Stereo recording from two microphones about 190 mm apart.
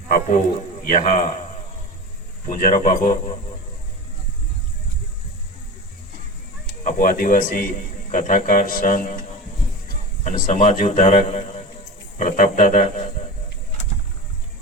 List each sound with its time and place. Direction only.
0.1 s a man's voice: 40° left (ahead or behind)
2.5 s a man's voice: 45° left (ahead or behind)
6.8 s a man's voice: 45° left (ahead or behind)
10.2 s a man's voice: 45° left (ahead or behind)